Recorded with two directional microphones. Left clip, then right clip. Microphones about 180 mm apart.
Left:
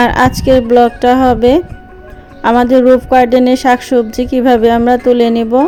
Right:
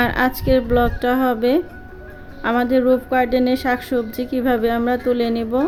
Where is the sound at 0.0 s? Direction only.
30° left (ahead or behind).